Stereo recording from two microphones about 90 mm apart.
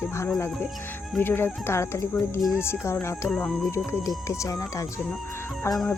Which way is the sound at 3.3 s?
10° left (ahead or behind).